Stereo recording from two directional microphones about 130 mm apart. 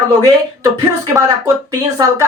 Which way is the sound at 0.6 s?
25° right (ahead or behind).